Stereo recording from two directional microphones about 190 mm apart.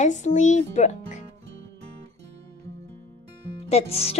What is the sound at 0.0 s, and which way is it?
A child's voice, 40° left (ahead or behind).